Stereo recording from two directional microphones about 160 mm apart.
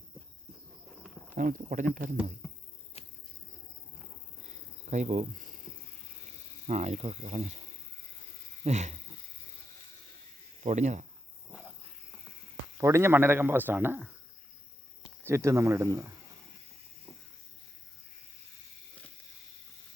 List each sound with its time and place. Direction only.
1.4 s speech: 55° right (ahead or behind)
3.0 s a sound: 40° left (ahead or behind)
4.4 s a sound: 45° right (ahead or behind)
6.7 s speech: 45° right (ahead or behind)
8.6 s speech: 45° right (ahead or behind)
10.6 s speech: 50° right (ahead or behind)
12.7 s speech: 20° right (ahead or behind)
15.2 s speech: 15° right (ahead or behind)